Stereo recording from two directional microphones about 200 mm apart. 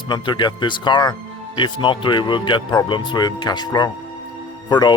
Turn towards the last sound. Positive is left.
turn(degrees=20)  # may be behind; listen again after turning